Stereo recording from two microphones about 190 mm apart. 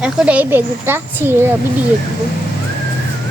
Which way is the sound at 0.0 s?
5° right (ahead or behind).